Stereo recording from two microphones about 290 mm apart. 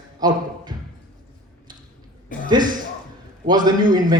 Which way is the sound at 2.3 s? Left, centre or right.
Left.